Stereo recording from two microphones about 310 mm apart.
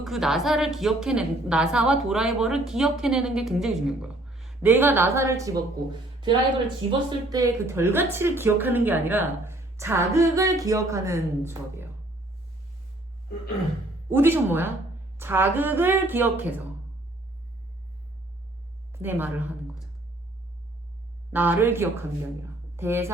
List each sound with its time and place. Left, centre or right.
0.0 s a woman's voice: centre
6.8 s speech: centre
14.1 s speech: centre
18.9 s a sound: centre
21.3 s speech: centre
22.4 s a sound: centre